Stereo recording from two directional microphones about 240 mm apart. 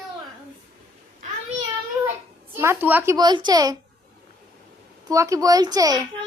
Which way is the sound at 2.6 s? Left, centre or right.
Centre.